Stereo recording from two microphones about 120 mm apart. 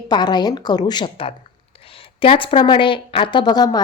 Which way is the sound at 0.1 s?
35° left (ahead or behind).